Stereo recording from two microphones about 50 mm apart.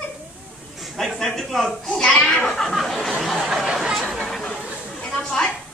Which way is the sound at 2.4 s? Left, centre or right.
Centre.